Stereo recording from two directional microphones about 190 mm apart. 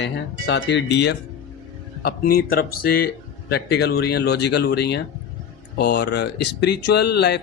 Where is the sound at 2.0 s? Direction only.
55° left (ahead or behind).